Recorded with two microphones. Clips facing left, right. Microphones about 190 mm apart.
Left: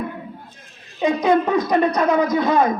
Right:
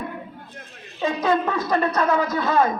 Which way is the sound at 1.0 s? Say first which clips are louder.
Left 4 dB; 15° left (ahead or behind).